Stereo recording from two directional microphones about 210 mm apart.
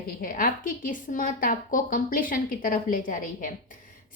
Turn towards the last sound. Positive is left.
turn(degrees=40)  # may be behind; listen again after turning